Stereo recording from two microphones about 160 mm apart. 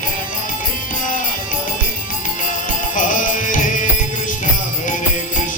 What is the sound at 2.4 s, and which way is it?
Music, 55° left (ahead or behind).